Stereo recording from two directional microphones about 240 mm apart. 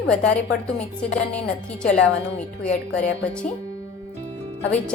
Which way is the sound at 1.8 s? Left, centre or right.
Centre.